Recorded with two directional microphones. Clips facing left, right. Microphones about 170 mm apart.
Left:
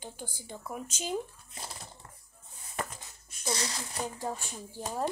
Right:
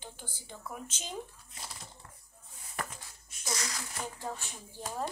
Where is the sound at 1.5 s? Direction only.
40° left (ahead or behind).